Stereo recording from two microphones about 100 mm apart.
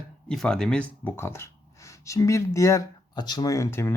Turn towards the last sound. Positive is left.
turn(degrees=25)  # may be behind; listen again after turning